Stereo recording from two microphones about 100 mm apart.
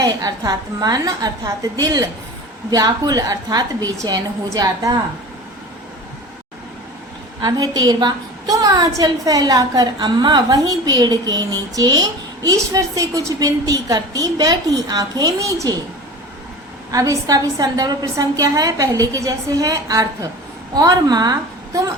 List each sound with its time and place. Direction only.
0.0 s a woman's voice: 40° right (ahead or behind)
7.4 s a woman's voice: 40° right (ahead or behind)
16.9 s a woman's voice: 35° right (ahead or behind)